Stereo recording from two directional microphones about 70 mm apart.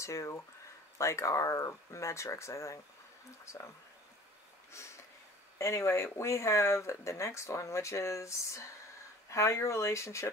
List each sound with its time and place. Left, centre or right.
0.0 s speech: left
4.7 s a sound: left
5.6 s speech: left